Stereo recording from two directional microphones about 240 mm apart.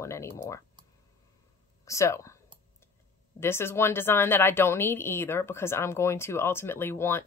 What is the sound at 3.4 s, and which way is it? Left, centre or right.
A woman's voice, centre.